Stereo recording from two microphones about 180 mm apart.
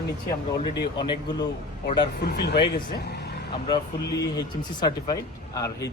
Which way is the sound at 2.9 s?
65° left (ahead or behind).